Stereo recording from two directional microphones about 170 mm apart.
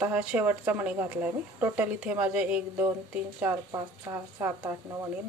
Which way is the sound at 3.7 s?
20° right (ahead or behind).